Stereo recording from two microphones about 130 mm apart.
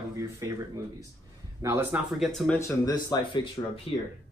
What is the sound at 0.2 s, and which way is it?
Speech, 20° right (ahead or behind).